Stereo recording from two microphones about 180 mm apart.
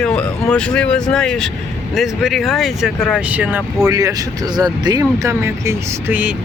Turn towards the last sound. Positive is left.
turn(degrees=-10)  # may be behind; listen again after turning